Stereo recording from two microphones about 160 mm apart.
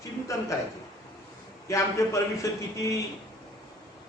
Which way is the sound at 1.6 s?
20° left (ahead or behind).